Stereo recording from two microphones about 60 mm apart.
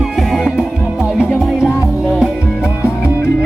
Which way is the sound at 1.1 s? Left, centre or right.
Centre.